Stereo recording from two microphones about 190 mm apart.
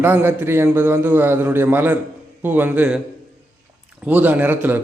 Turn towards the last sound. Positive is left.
turn(degrees=-10)  # may be behind; listen again after turning